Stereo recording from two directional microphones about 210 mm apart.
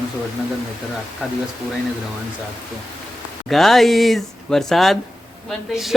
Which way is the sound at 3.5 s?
Centre (ahead or behind).